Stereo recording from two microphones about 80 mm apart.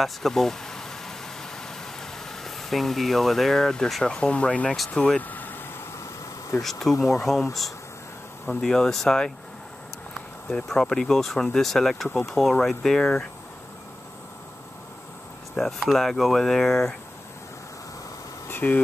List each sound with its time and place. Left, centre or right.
0.0 s vehicle: centre
4.9 s speech: centre
6.6 s speech: centre
8.5 s speech: centre
10.5 s speech: centre
15.5 s speech: centre
18.5 s a sound: left